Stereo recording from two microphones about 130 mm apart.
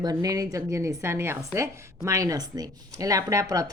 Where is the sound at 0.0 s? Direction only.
30° right (ahead or behind).